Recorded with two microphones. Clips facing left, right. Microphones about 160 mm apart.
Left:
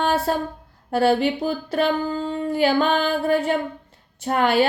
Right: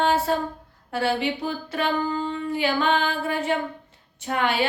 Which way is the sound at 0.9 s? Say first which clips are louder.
Left 6 dB; 40° left (ahead or behind).